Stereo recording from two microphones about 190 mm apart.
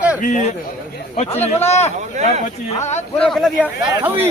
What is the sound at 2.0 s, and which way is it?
Speech, 40° right (ahead or behind).